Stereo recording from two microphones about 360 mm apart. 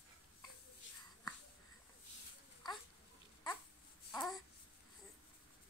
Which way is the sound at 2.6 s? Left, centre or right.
Centre.